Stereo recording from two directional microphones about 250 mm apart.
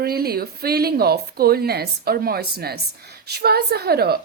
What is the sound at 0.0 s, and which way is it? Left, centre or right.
Speech, right.